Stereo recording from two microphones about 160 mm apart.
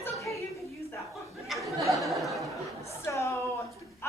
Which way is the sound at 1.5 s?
Centre (ahead or behind).